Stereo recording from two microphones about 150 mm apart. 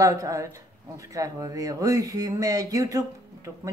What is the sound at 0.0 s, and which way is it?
Speech, 20° right (ahead or behind).